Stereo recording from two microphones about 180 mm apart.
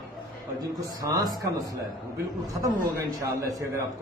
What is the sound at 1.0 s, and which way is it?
A man's voice, 20° right (ahead or behind).